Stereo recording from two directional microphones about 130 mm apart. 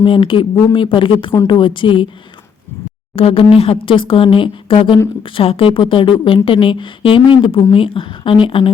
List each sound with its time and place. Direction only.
0.0 s speech: 40° left (ahead or behind)
3.2 s speech: 45° left (ahead or behind)